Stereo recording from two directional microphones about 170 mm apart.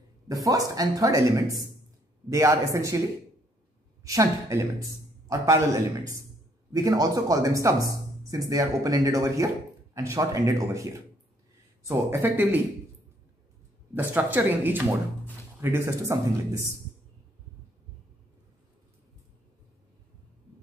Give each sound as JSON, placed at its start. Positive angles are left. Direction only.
{"t": 0.3, "sound": "speech", "side_deg": -20}
{"t": 4.0, "sound": "a man's voice", "side_deg": -20}
{"t": 11.9, "sound": "speech", "side_deg": -15}
{"t": 13.9, "sound": "speech", "side_deg": -10}